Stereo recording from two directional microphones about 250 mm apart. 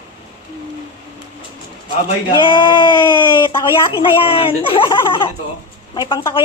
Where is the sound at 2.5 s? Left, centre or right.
Centre.